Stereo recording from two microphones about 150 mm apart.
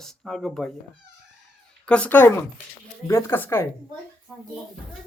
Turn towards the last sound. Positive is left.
turn(degrees=5)  # may be behind; listen again after turning